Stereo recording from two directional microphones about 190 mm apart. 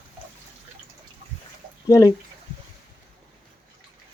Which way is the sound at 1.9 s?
15° left (ahead or behind).